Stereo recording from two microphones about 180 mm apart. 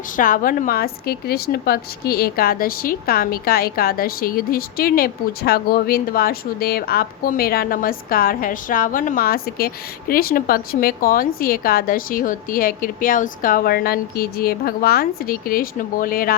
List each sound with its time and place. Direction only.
0.2 s a woman's voice: 50° left (ahead or behind)